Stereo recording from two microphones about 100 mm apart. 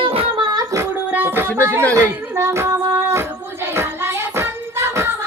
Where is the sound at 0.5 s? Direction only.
30° right (ahead or behind).